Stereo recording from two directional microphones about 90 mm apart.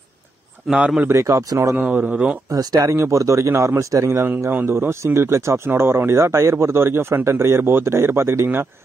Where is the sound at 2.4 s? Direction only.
45° right (ahead or behind).